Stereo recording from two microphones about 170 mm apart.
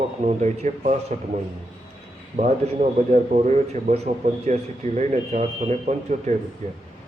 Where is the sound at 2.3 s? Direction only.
45° right (ahead or behind).